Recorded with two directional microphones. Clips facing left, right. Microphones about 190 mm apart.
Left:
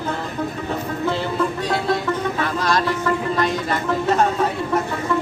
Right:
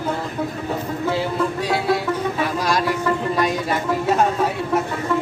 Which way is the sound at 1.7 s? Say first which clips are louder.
Right 1 dB; 10° right (ahead or behind).